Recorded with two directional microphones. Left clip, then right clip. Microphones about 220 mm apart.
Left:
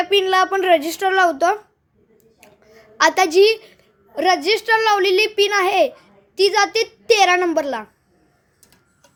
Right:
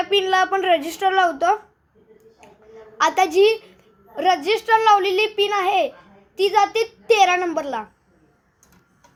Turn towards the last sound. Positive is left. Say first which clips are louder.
# left 4 dB
turn(degrees=25)  # may be behind; listen again after turning